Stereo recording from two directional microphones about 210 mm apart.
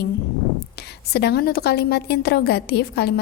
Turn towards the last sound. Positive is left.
turn(degrees=50)  # may be behind; listen again after turning